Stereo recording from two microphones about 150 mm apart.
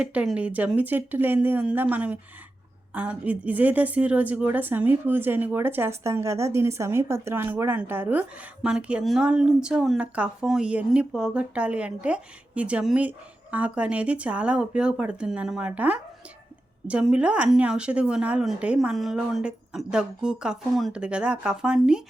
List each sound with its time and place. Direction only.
0.0 s a woman's voice: 10° right (ahead or behind)